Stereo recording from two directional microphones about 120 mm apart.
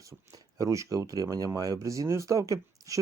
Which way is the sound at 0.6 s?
25° right (ahead or behind).